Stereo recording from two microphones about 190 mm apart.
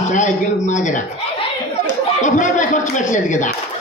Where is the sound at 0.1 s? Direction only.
40° left (ahead or behind).